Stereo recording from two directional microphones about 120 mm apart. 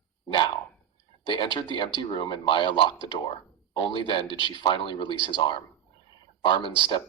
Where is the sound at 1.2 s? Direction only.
45° left (ahead or behind).